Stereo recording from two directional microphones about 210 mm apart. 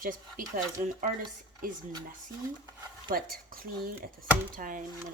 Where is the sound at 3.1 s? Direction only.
45° right (ahead or behind).